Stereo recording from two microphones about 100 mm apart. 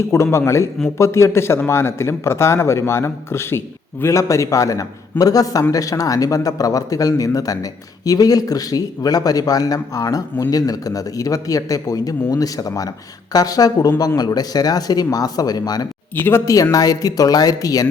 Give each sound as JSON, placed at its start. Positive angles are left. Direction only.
{"t": 0.1, "sound": "speech", "side_deg": 25}
{"t": 16.1, "sound": "speech", "side_deg": 20}
{"t": 16.7, "sound": "speech", "side_deg": 35}